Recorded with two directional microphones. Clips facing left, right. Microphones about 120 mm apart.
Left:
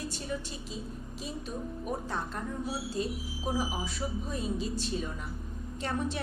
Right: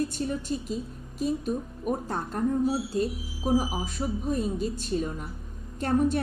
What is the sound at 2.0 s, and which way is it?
A woman's voice, 45° right (ahead or behind).